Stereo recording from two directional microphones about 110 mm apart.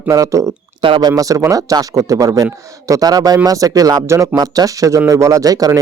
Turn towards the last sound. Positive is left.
turn(degrees=-35)  # may be behind; listen again after turning